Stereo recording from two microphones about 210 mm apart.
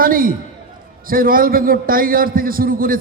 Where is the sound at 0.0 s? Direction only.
40° right (ahead or behind).